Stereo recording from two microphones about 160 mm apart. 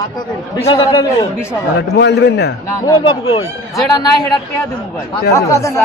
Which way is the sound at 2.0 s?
90° left.